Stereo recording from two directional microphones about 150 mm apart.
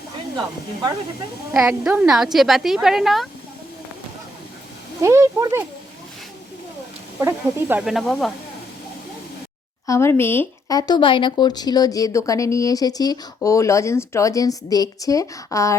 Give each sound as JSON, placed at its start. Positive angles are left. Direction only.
{"t": 1.5, "sound": "a woman's voice", "side_deg": -5}
{"t": 5.0, "sound": "speech", "side_deg": -20}
{"t": 7.2, "sound": "speech", "side_deg": -15}
{"t": 7.9, "sound": "a woman's voice", "side_deg": 0}
{"t": 9.8, "sound": "speech", "side_deg": 20}